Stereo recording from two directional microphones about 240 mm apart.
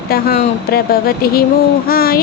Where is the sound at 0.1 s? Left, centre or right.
Left.